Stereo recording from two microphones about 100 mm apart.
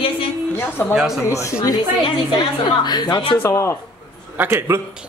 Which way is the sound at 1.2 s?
30° left (ahead or behind).